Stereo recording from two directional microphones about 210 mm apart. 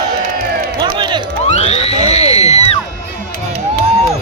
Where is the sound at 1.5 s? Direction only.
30° left (ahead or behind).